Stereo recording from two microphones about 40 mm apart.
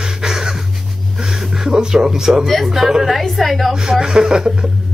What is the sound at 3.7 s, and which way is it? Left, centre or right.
Speech, centre.